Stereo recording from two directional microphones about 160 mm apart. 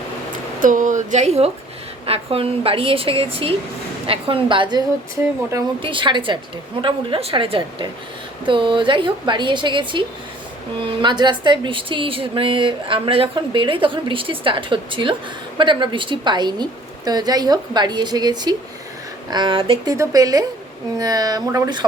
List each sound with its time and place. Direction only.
0.6 s a woman's voice: 55° right (ahead or behind); by 4.8 s 30° right (ahead or behind)
5.8 s a woman's voice: 30° right (ahead or behind)
19.8 s a woman's voice: 20° right (ahead or behind)